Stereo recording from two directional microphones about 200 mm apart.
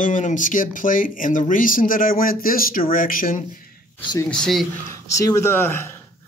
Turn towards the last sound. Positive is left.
turn(degrees=10)  # may be behind; listen again after turning